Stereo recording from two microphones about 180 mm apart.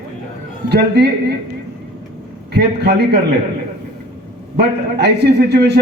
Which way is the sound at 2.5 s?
65° right (ahead or behind).